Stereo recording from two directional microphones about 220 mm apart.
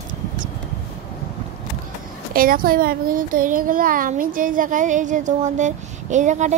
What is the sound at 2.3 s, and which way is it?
A child's voice, 40° right (ahead or behind).